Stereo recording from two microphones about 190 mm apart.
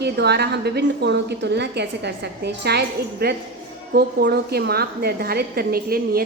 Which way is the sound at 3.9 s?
60° right (ahead or behind).